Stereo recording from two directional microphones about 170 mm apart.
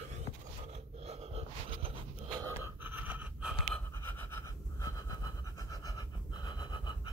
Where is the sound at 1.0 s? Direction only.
40° right (ahead or behind).